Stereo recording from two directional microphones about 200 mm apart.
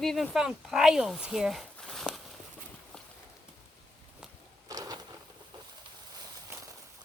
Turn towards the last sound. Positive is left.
turn(degrees=-20)  # may be behind; listen again after turning